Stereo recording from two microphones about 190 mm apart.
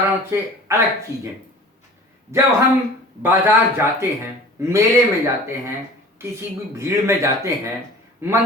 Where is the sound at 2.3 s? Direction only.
15° right (ahead or behind).